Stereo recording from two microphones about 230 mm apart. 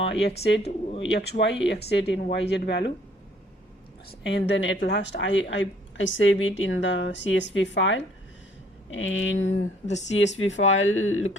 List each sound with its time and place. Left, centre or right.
0.1 s speech: left
0.5 s speech: left
1.1 s speech: left
4.1 s speech: left
9.5 s speech: left
10.4 s speech: left